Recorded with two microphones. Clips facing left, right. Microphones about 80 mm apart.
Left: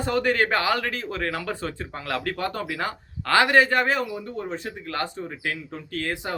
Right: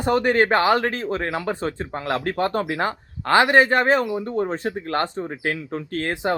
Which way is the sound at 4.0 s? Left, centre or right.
Right.